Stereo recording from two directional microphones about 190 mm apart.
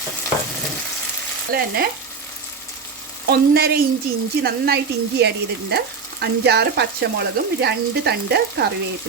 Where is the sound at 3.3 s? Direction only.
55° right (ahead or behind).